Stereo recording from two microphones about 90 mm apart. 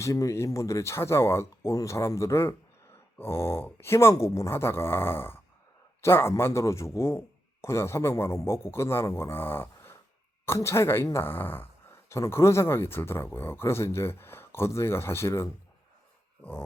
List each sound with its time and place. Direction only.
0.0 s speech: 35° left (ahead or behind)